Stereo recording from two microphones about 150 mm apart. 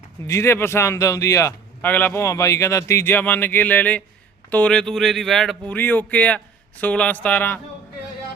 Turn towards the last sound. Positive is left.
turn(degrees=10)  # may be behind; listen again after turning